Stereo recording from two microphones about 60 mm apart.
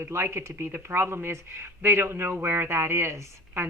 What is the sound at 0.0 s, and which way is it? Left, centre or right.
A woman's voice, right.